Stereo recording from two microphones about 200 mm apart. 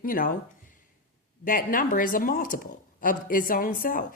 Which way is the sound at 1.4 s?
45° left (ahead or behind).